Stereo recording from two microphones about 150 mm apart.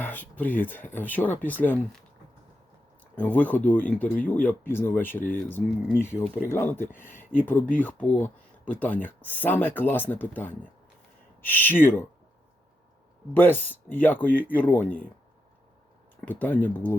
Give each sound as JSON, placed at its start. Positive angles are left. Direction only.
{"t": 0.0, "sound": "speech", "side_deg": 10}
{"t": 3.2, "sound": "speech", "side_deg": 10}
{"t": 13.3, "sound": "speech", "side_deg": 15}
{"t": 16.2, "sound": "speech", "side_deg": 10}